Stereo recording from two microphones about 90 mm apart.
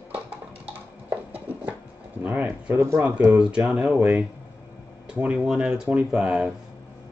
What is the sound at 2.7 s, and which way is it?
Speech, 30° right (ahead or behind).